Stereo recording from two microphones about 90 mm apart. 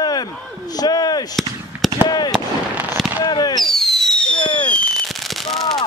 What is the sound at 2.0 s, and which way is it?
Fireworks, 55° left (ahead or behind).